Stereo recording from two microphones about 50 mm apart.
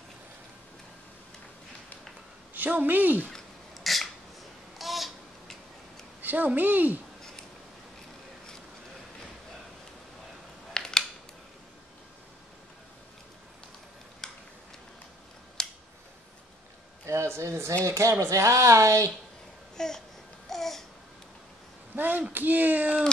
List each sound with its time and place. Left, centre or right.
2.5 s a woman's voice: right
3.3 s a sound: centre
4.7 s babbling: centre
6.2 s a woman's voice: right
10.7 s scissors: centre
14.2 s a sound: centre
15.6 s scissors: centre
17.0 s a sound: right
17.8 s speech: right
18.1 s speech: right
19.8 s babbling: centre
21.9 s a woman's voice: right